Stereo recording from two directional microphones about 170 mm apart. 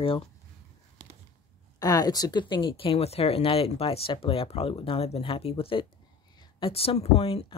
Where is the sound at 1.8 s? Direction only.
20° left (ahead or behind).